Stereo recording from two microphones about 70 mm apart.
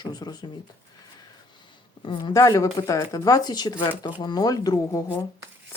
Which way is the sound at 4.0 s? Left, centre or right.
Left.